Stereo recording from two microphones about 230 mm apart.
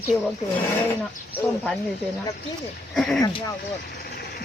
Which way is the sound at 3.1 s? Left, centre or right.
Centre.